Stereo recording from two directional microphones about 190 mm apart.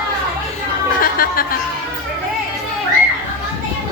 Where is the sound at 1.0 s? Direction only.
50° left (ahead or behind).